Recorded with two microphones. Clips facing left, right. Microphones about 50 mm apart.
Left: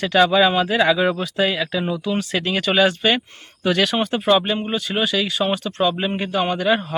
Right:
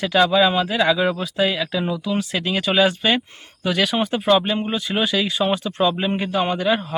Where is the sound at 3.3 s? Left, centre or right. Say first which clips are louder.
Even; centre.